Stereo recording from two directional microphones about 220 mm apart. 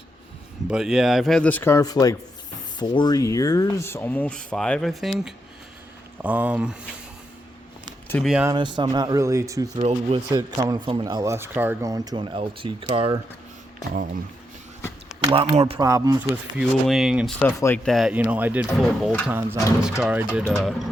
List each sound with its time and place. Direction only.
0.7 s a man's voice: centre (ahead or behind)
8.0 s a sound: 10° left (ahead or behind)
8.3 s a man's voice: 5° right (ahead or behind)
8.5 s speech: 20° right (ahead or behind)
9.7 s speech: 30° right (ahead or behind)
13.9 s speech: 40° right (ahead or behind)
15.3 s speech: 25° right (ahead or behind)
15.9 s speech: 15° right (ahead or behind)
16.6 s a man's voice: centre (ahead or behind)
17.4 s speech: 10° left (ahead or behind)
17.9 s a man's voice: 5° right (ahead or behind)